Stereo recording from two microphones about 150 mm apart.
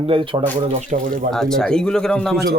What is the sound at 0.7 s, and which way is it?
Speech, 55° right (ahead or behind).